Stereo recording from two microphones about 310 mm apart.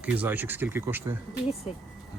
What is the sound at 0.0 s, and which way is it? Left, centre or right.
Speech, centre.